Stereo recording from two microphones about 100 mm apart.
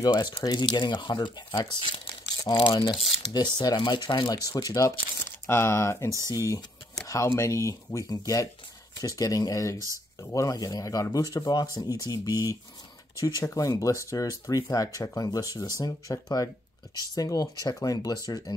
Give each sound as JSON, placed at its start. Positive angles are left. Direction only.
{"t": 0.0, "sound": "speech", "side_deg": 45}
{"t": 3.3, "sound": "speech", "side_deg": 45}
{"t": 4.5, "sound": "speech", "side_deg": 35}